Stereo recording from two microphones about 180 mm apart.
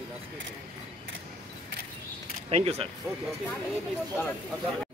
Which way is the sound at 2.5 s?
35° right (ahead or behind).